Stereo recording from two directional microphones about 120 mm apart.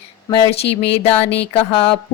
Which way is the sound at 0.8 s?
55° left (ahead or behind).